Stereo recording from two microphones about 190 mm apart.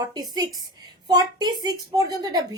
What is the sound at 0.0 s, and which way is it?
A woman's voice, 20° right (ahead or behind).